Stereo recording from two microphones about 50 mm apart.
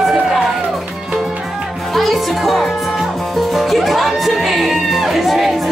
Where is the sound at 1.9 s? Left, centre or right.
Centre.